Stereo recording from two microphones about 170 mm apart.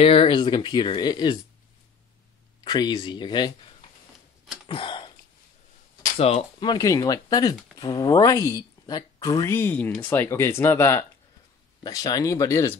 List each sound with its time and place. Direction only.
0.0 s speech: 35° left (ahead or behind)
2.6 s speech: 25° left (ahead or behind)
4.6 s a sound: 30° left (ahead or behind)
6.1 s speech: 35° left (ahead or behind); by 12.7 s 15° left (ahead or behind)